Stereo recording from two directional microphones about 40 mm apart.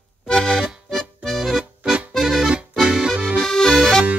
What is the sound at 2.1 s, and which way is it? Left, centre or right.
Accordion, centre.